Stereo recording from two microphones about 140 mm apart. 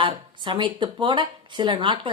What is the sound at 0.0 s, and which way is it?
Speech, 35° right (ahead or behind).